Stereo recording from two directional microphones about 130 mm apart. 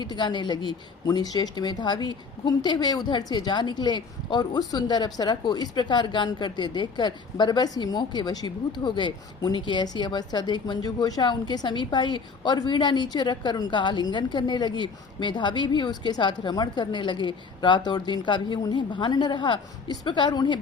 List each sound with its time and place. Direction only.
0.0 s speech: 35° left (ahead or behind)